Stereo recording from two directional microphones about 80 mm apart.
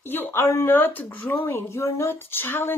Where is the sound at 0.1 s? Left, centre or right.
Left.